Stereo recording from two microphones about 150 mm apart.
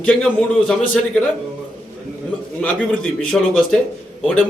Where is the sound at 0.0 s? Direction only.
10° left (ahead or behind).